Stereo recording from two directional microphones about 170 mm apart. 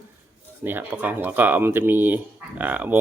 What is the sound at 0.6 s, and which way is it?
Speech, 10° right (ahead or behind).